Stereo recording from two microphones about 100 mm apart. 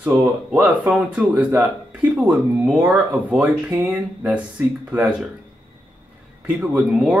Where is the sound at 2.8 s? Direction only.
15° right (ahead or behind).